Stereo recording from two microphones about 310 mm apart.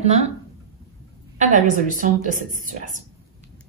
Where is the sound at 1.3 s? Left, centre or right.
Right.